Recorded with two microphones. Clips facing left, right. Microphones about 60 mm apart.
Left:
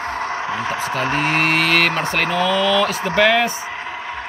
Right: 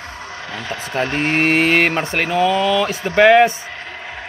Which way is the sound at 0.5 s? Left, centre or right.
Left.